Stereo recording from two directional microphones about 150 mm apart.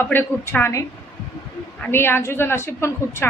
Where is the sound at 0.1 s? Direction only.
15° left (ahead or behind).